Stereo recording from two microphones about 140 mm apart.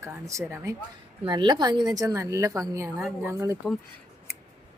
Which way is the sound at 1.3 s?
30° right (ahead or behind).